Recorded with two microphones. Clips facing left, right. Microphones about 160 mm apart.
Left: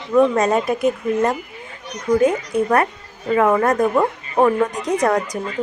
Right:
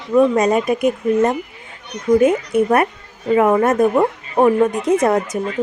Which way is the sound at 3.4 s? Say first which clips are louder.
Right 2 dB; 20° right (ahead or behind).